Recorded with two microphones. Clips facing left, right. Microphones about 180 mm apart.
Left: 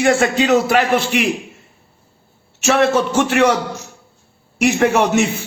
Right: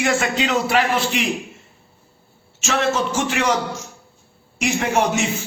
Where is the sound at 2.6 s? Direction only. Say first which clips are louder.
Left 6 dB; 55° left (ahead or behind).